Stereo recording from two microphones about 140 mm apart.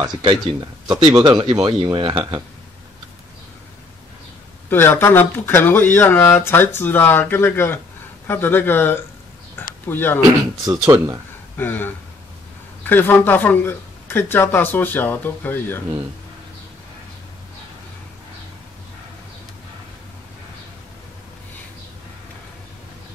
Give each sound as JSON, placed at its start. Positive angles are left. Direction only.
{"t": 0.0, "sound": "speech", "side_deg": -35}
{"t": 4.6, "sound": "speech", "side_deg": 15}
{"t": 10.6, "sound": "speech", "side_deg": -25}
{"t": 11.5, "sound": "a sound", "side_deg": 15}
{"t": 12.8, "sound": "speech", "side_deg": 15}